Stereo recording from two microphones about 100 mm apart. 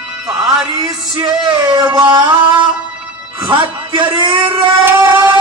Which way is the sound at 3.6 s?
55° right (ahead or behind).